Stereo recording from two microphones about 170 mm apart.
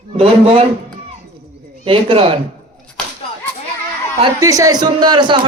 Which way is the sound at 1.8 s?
30° right (ahead or behind).